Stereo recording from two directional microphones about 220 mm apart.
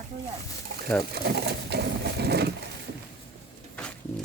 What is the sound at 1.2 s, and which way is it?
Pigeon, 50° right (ahead or behind).